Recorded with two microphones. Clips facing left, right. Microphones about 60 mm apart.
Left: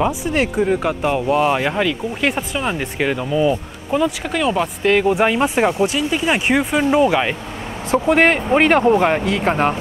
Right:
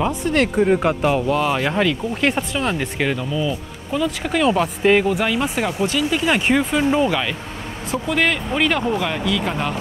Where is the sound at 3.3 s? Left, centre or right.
Left.